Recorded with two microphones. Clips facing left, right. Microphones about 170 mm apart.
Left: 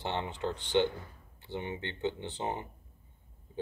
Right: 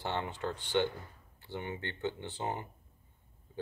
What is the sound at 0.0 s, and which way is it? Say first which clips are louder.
Speech: left 1 dB; 20° left (ahead or behind).